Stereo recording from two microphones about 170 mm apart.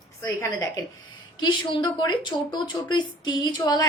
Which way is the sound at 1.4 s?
25° left (ahead or behind).